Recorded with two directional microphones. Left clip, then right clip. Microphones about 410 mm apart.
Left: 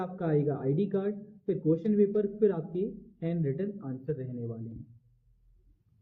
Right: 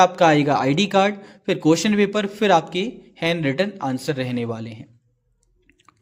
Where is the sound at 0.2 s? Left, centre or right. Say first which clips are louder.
Right 14 dB; right.